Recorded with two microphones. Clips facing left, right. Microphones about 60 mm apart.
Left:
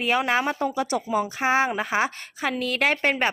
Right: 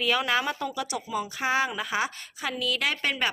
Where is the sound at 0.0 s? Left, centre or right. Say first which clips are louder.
Left 3 dB; left.